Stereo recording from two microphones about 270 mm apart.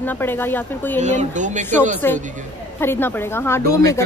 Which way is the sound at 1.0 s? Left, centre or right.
Right.